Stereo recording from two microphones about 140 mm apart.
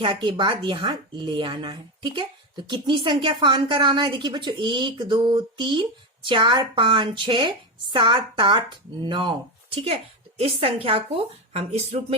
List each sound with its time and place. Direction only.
0.0 s a woman's voice: 35° right (ahead or behind)